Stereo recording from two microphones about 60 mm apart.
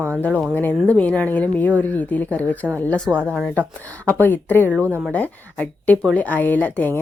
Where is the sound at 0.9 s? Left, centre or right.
Left.